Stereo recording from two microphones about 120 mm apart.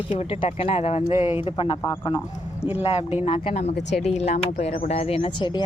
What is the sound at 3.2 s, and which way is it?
Speech, 50° left (ahead or behind).